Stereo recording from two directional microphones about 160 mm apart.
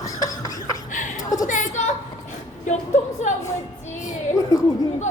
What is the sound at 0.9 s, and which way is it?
Chuckle, 50° left (ahead or behind).